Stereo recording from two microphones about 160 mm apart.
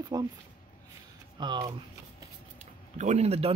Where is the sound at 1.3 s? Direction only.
30° right (ahead or behind).